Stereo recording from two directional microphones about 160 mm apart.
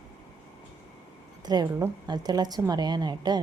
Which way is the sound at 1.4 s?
25° right (ahead or behind).